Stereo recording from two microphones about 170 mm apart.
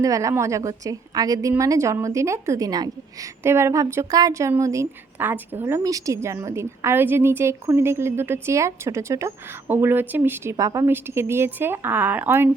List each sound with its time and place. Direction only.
0.0 s a woman's voice: 20° right (ahead or behind)